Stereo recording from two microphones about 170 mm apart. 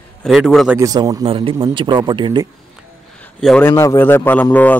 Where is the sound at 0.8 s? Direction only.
20° right (ahead or behind).